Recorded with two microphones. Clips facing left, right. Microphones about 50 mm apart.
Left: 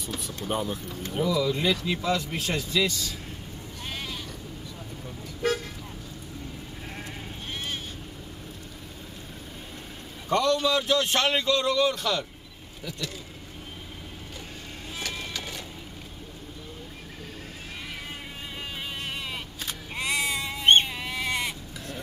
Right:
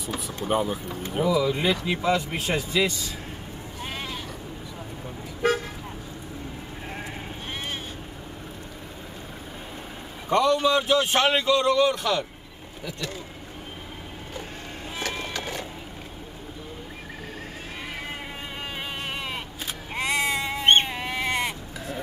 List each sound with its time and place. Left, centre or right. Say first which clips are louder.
0.1 s speech: right 5 dB; centre
3.8 s sheep: right 2 dB; right
10.3 s speech: right 3 dB; centre
15.0 s music: right 4 dB; right
18.8 s sheep: right 2 dB; right